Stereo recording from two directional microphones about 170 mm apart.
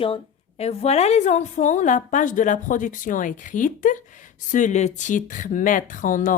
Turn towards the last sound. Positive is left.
turn(degrees=50)  # may be behind; listen again after turning